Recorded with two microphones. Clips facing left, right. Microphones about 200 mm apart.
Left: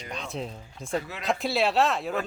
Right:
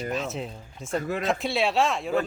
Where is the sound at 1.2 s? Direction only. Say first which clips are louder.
Left 2 dB; centre (ahead or behind).